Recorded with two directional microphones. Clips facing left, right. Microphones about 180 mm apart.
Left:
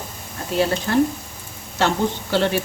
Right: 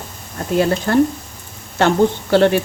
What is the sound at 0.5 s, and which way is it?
Speech, 50° right (ahead or behind).